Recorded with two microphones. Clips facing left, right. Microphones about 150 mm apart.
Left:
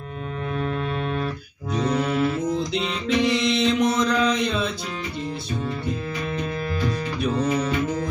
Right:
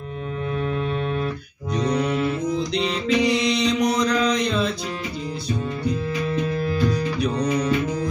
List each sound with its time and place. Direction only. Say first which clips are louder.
1.7 s music: right 1 dB; 5° left (ahead or behind)
6.4 s music: right 4 dB; centre (ahead or behind)